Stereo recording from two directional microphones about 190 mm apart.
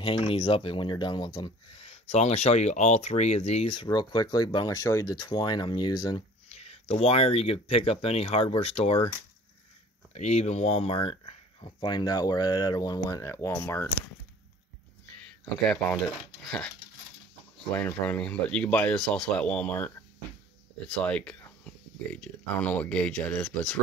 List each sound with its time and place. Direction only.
0.0 s speech: 30° left (ahead or behind)
6.5 s speech: 35° left (ahead or behind)
10.1 s speech: 35° left (ahead or behind); by 13.8 s 10° left (ahead or behind)
15.7 s speech: 5° left (ahead or behind)
21.0 s speech: 5° left (ahead or behind)